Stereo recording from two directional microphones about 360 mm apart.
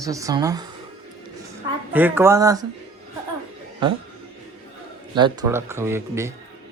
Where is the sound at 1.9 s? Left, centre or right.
Centre.